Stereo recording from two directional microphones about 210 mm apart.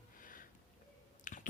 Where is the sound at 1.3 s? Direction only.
40° left (ahead or behind).